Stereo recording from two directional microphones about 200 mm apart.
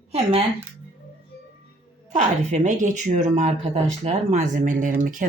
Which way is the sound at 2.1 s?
40° right (ahead or behind).